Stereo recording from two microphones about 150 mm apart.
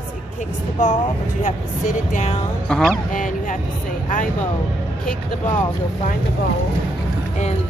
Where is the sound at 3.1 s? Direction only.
60° left (ahead or behind).